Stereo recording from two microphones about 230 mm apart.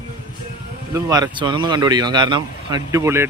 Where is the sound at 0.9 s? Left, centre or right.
Centre.